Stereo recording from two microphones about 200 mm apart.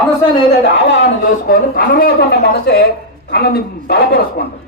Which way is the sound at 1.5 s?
45° left (ahead or behind).